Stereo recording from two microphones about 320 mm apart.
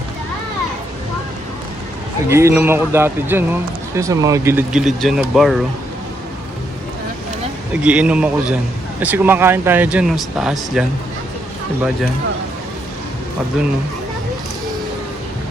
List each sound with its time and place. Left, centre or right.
2.3 s a man's voice: centre
7.7 s speech: centre